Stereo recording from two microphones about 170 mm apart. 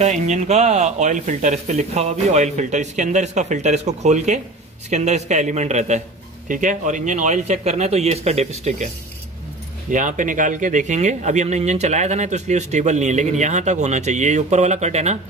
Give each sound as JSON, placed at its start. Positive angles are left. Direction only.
{"t": 0.0, "sound": "speech", "side_deg": -40}